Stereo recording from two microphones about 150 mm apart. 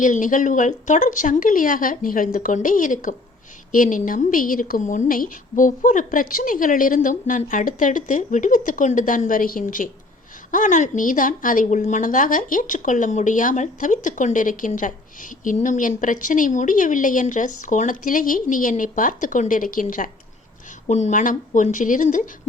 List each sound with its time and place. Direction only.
0.0 s a woman's voice: 60° left (ahead or behind)
20.8 s a woman's voice: 50° left (ahead or behind)